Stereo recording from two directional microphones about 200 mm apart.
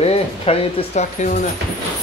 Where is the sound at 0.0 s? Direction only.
30° left (ahead or behind).